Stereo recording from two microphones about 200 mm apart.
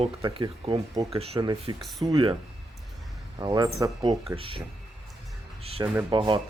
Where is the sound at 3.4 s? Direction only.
20° right (ahead or behind).